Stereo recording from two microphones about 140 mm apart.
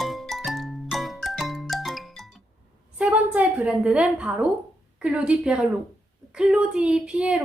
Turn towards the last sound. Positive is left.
turn(degrees=-5)  # may be behind; listen again after turning